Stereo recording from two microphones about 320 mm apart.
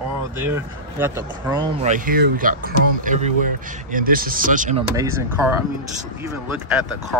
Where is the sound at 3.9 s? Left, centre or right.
Right.